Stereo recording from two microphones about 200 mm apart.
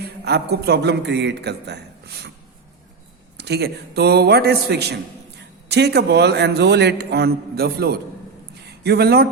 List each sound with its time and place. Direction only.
0.3 s a man's voice: 55° right (ahead or behind)
3.3 s a man's voice: 55° right (ahead or behind)
8.6 s a sound: 55° right (ahead or behind)